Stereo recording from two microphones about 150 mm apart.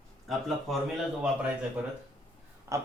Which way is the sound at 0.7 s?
Centre (ahead or behind).